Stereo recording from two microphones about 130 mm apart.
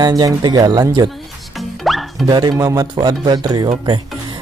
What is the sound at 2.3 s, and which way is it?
Speech, 30° right (ahead or behind).